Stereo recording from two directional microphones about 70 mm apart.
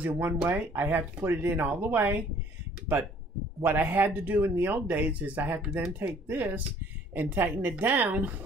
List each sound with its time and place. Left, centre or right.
0.0 s speech: right
3.6 s speech: right